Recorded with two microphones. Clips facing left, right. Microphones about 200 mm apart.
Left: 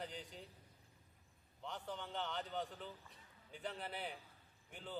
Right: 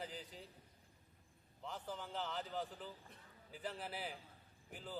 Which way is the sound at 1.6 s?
Centre (ahead or behind).